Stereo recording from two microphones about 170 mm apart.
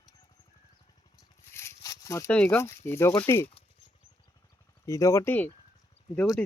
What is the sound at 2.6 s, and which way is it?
Speech, 15° left (ahead or behind).